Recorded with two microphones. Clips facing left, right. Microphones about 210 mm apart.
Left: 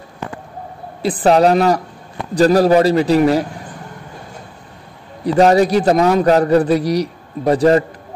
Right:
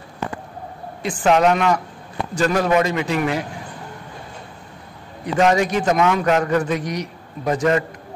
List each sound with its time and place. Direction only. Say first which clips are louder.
1.2 s a man's voice: left 4 dB; 35° left (ahead or behind)
5.2 s a man's voice: left 6 dB; 35° left (ahead or behind)